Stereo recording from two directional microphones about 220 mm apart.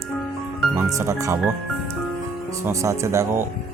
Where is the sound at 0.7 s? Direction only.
15° right (ahead or behind).